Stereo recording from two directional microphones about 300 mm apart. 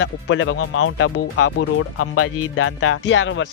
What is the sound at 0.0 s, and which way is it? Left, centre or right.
Speech, left.